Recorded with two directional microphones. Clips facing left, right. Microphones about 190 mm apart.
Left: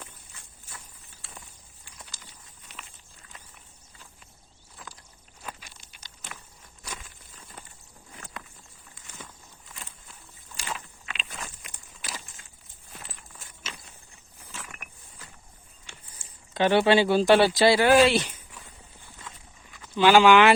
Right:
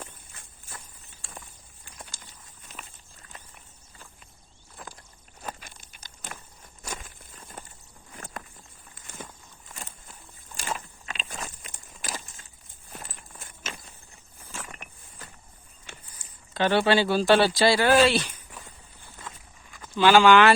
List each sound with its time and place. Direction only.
0.0 s clip-clop: 50° right (ahead or behind)
1.8 s a sound: 50° right (ahead or behind)
4.8 s vehicle: 50° right (ahead or behind)
5.4 s a sound: 50° right (ahead or behind)
8.2 s walk: 45° right (ahead or behind)
9.7 s a sound: 45° right (ahead or behind)
12.9 s walk: 45° right (ahead or behind)
15.2 s vehicle: 50° right (ahead or behind)
16.1 s speech: 20° left (ahead or behind)
19.3 s walk: 50° right (ahead or behind)
20.0 s speech: 15° left (ahead or behind)